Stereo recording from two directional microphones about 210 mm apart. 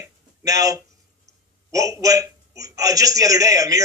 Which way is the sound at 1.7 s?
15° right (ahead or behind).